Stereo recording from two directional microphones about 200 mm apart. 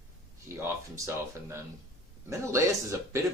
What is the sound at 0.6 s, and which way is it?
Speech, 15° right (ahead or behind).